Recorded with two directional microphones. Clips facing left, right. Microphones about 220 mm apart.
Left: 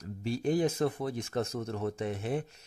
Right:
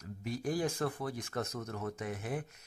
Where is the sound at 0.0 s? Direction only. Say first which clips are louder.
Left 5 dB; 30° left (ahead or behind).